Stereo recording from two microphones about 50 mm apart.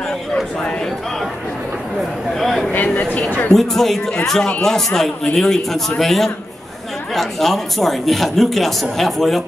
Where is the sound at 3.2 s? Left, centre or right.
Left.